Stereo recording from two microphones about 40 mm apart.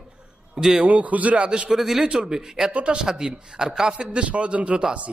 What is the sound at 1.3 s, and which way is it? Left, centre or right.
Speech, right.